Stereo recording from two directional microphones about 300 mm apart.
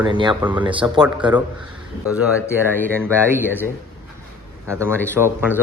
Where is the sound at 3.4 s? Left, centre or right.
Centre.